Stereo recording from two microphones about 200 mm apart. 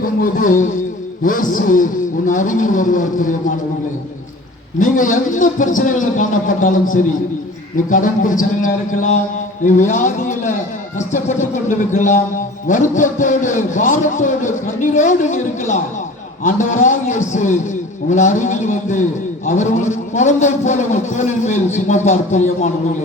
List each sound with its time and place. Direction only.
0.0 s a sound: 45° left (ahead or behind)
1.2 s a man's voice: 45° left (ahead or behind)
4.8 s a man's voice: 40° left (ahead or behind)